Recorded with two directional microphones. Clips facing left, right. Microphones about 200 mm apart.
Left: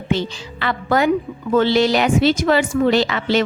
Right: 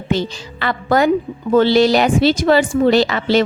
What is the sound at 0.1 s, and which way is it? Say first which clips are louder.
Speech: right 2 dB; 40° right (ahead or behind).